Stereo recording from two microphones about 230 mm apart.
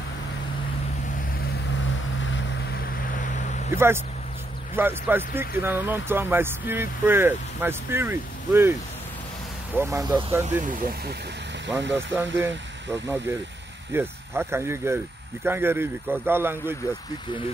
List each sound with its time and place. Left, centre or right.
2.2 s vehicle: left
3.7 s speech: centre
9.8 s speech: centre
10.6 s speech: right
11.9 s speech: centre